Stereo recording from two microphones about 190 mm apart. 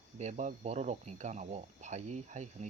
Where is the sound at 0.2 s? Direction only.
40° right (ahead or behind).